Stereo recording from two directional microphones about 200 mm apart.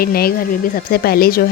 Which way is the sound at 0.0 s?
50° left (ahead or behind).